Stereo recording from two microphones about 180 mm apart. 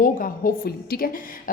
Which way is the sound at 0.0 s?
50° left (ahead or behind).